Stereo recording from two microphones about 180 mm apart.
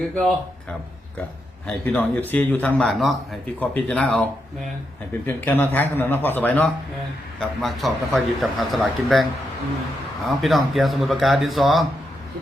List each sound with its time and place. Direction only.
0.1 s speech: 5° left (ahead or behind)
1.6 s a man's voice: 10° left (ahead or behind)
10.2 s speech: centre (ahead or behind)